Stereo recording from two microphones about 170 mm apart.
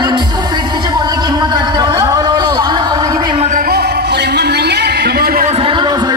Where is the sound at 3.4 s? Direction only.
55° right (ahead or behind).